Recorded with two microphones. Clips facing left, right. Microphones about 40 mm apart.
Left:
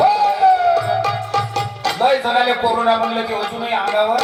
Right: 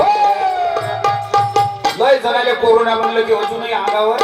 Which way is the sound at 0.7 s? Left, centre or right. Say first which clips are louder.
Even; right.